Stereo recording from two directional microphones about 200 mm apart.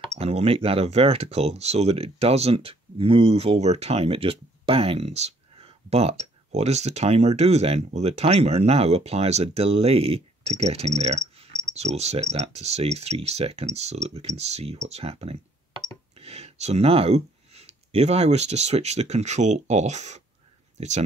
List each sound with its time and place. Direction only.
0.2 s speech: 30° right (ahead or behind)